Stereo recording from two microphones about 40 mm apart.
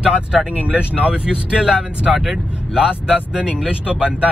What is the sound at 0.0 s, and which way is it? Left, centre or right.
Speech, centre.